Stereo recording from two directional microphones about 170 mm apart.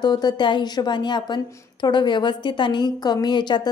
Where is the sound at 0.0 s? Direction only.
25° left (ahead or behind).